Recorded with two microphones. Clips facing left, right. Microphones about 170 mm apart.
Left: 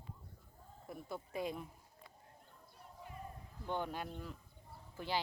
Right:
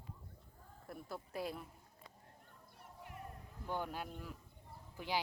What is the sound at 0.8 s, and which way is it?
Speech, centre (ahead or behind).